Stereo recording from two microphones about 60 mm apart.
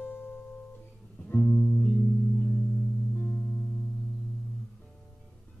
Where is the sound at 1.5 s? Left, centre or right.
Left.